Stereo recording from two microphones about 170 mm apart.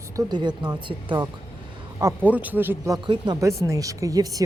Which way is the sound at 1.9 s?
15° right (ahead or behind).